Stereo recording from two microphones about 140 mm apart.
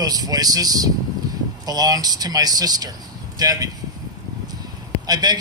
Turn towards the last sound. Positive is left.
turn(degrees=-30)  # may be behind; listen again after turning